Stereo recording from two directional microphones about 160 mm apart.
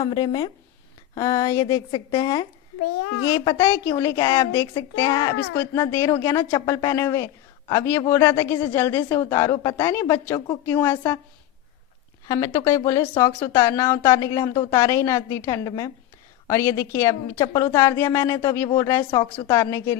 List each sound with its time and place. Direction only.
0.0 s a woman's voice: 25° left (ahead or behind)
12.3 s a woman's voice: 20° left (ahead or behind)